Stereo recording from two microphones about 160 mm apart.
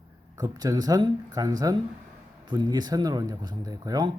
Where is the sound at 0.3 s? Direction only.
25° right (ahead or behind).